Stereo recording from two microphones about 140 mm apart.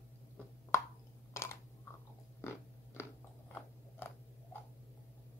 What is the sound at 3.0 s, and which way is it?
Biting, 20° left (ahead or behind).